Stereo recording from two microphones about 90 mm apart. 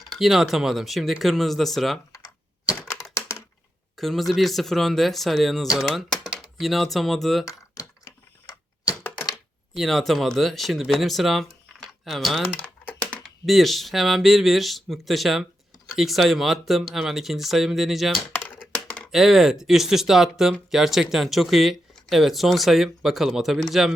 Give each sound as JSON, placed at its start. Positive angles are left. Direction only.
{"t": 0.1, "sound": "speech", "side_deg": 0}
{"t": 3.2, "sound": "a sound", "side_deg": 35}
{"t": 3.9, "sound": "speech", "side_deg": 0}
{"t": 9.7, "sound": "speech", "side_deg": 0}
{"t": 12.5, "sound": "typing", "side_deg": 20}
{"t": 13.2, "sound": "speech", "side_deg": 0}
{"t": 18.3, "sound": "a sound", "side_deg": 20}
{"t": 18.7, "sound": "typing", "side_deg": 10}
{"t": 19.1, "sound": "speech", "side_deg": 0}